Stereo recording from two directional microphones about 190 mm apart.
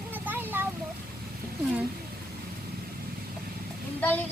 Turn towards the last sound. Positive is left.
turn(degrees=10)  # may be behind; listen again after turning